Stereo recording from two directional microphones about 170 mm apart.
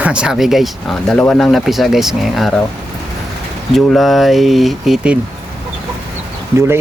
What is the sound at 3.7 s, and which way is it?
Speech, centre (ahead or behind).